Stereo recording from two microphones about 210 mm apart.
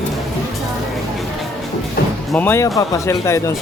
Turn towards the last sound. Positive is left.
turn(degrees=15)  # may be behind; listen again after turning